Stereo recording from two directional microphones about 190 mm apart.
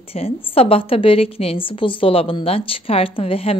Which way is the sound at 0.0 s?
30° left (ahead or behind).